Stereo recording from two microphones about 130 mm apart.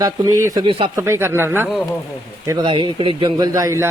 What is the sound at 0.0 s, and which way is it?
A man's voice, 25° right (ahead or behind).